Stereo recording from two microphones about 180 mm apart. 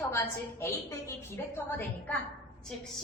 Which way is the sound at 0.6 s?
15° left (ahead or behind).